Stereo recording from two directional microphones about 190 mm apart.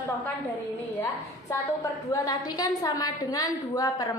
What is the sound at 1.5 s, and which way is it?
A woman's voice, 20° left (ahead or behind).